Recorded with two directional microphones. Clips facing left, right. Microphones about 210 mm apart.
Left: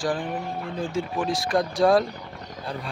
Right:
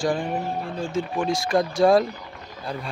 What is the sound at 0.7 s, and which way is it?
Speech, 20° left (ahead or behind).